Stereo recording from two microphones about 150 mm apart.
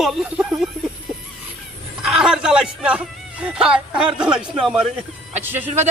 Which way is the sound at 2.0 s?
5° right (ahead or behind).